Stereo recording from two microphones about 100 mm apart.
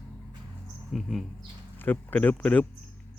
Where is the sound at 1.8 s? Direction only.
20° left (ahead or behind).